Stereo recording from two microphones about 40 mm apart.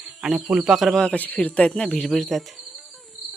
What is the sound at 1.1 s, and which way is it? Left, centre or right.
Speech, left.